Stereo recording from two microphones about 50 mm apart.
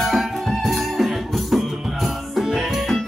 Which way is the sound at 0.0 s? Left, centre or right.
Centre.